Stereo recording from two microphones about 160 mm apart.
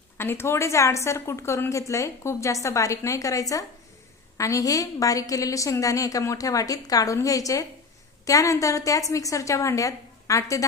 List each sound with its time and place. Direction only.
0.2 s a woman's voice: 15° left (ahead or behind)